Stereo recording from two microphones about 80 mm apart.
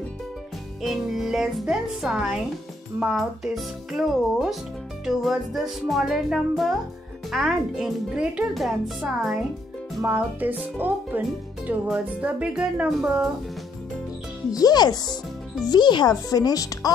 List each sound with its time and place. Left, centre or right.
0.8 s music: centre
9.0 s speech: centre
10.0 s speech: right
14.5 s a child's voice: left
15.7 s speech: left